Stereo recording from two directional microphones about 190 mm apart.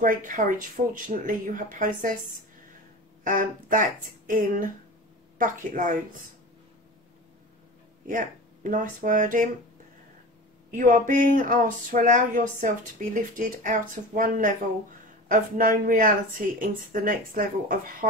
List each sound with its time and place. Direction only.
0.0 s speech: 45° right (ahead or behind)
3.3 s speech: 45° right (ahead or behind)
8.1 s speech: 45° right (ahead or behind)
10.7 s speech: 45° right (ahead or behind)